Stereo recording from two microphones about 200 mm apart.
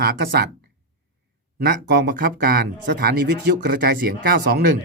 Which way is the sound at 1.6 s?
55° right (ahead or behind).